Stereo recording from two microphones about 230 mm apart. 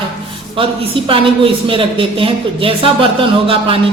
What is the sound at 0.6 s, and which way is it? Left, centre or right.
A woman's voice, right.